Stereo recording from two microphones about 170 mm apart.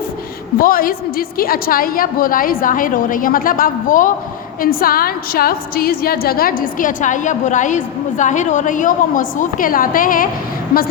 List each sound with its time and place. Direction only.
0.6 s a woman's voice: 55° left (ahead or behind)